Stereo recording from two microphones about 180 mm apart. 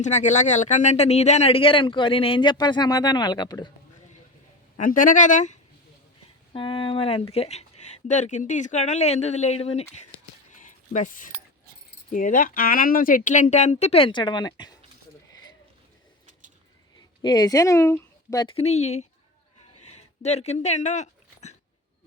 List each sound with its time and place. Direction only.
0.0 s speech: 40° left (ahead or behind); by 3.7 s 25° left (ahead or behind)
4.8 s speech: 50° left (ahead or behind)
6.5 s speech: 30° left (ahead or behind)
10.6 s a sound: 45° left (ahead or behind)
12.1 s speech: 50° left (ahead or behind); by 14.8 s 25° left (ahead or behind)
17.2 s speech: 20° left (ahead or behind)
18.4 s speech: 35° left (ahead or behind)
19.9 s a sound: 40° left (ahead or behind)